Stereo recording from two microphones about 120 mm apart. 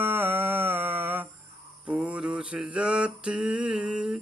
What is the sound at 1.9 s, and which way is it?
Mantra, 10° right (ahead or behind).